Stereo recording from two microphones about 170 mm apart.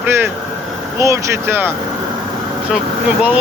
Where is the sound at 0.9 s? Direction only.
15° right (ahead or behind).